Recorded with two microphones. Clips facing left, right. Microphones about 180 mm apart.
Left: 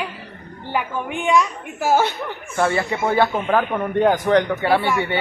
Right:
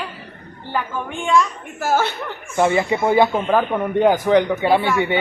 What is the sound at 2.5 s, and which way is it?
A man's voice, 15° right (ahead or behind).